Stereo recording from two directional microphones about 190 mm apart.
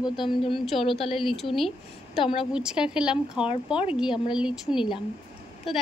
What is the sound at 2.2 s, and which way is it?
Speech, 30° left (ahead or behind).